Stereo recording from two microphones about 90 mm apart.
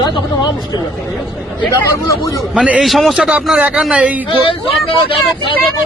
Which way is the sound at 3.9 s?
15° right (ahead or behind).